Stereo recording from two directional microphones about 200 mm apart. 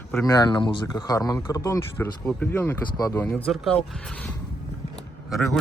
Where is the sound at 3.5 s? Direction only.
Centre (ahead or behind).